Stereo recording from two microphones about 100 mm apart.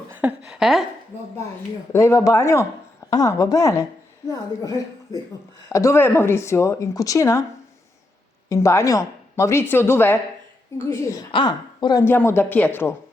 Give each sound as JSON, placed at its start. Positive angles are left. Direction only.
{"t": 0.1, "sound": "a sound", "side_deg": -15}
{"t": 1.9, "sound": "a woman's voice", "side_deg": 30}
{"t": 5.6, "sound": "speech", "side_deg": 30}
{"t": 8.4, "sound": "a woman's voice", "side_deg": 30}
{"t": 11.3, "sound": "a woman's voice", "side_deg": 55}
{"t": 12.0, "sound": "speech", "side_deg": 25}